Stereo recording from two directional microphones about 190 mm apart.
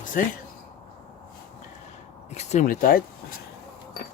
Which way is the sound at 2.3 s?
35° left (ahead or behind).